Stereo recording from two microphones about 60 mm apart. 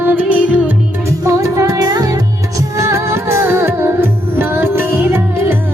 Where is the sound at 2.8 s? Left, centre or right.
Right.